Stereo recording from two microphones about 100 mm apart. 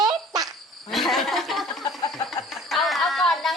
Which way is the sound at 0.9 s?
Centre (ahead or behind).